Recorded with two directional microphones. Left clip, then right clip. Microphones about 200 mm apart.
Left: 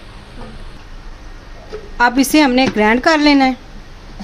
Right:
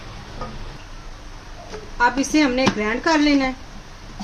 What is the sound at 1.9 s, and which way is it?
Speech, 60° left (ahead or behind).